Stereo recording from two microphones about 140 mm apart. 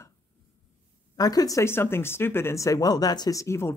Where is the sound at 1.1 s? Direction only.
25° left (ahead or behind).